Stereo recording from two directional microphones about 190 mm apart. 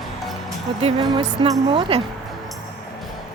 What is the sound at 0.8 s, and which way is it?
Speech, 30° right (ahead or behind).